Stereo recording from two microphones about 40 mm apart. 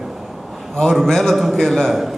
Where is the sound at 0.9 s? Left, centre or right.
Centre.